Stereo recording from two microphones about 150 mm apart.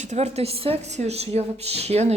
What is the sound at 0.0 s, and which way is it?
A woman's voice, 50° right (ahead or behind).